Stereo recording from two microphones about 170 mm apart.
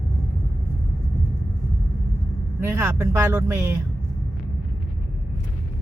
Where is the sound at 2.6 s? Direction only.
15° right (ahead or behind).